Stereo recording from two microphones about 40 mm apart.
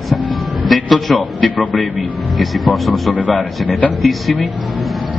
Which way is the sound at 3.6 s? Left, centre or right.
Left.